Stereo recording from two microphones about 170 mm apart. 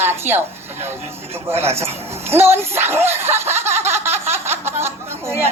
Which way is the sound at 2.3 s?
15° right (ahead or behind).